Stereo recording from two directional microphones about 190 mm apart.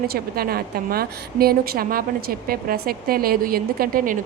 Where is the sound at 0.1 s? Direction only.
50° right (ahead or behind).